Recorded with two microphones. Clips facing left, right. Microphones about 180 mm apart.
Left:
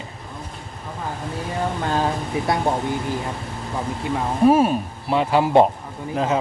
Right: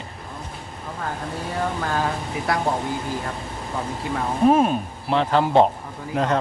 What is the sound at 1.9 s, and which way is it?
Speech, 25° left (ahead or behind).